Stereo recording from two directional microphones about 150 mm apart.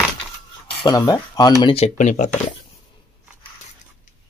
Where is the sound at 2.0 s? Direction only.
55° left (ahead or behind).